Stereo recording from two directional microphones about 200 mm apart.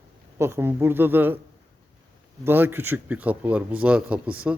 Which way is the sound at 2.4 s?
10° right (ahead or behind).